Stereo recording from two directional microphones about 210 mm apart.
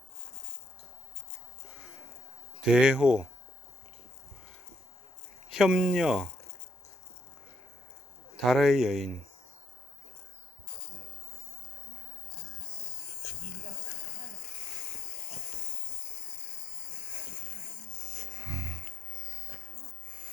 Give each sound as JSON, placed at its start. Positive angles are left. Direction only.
{"t": 2.6, "sound": "speech", "side_deg": -5}
{"t": 5.5, "sound": "speech", "side_deg": 0}
{"t": 8.4, "sound": "speech", "side_deg": 0}
{"t": 18.3, "sound": "music", "side_deg": -20}
{"t": 20.1, "sound": "owl", "side_deg": -25}